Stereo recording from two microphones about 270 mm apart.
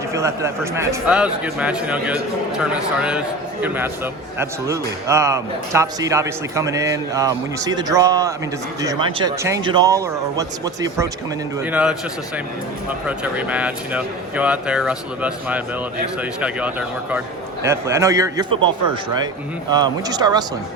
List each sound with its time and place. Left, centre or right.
0.1 s a man's voice: centre
13.1 s a man's voice: centre
19.7 s a man's voice: centre